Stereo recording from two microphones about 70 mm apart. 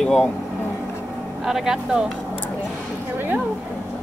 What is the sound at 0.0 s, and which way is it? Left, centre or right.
Speech, centre.